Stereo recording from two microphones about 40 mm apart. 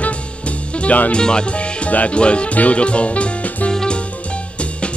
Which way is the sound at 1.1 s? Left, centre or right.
Left.